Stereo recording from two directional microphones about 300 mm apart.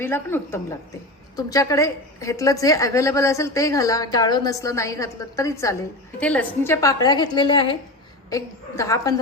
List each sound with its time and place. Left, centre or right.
0.0 s a woman's voice: centre